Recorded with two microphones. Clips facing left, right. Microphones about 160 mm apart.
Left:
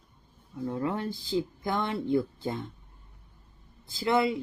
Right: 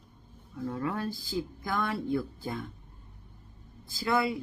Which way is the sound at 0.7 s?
25° left (ahead or behind).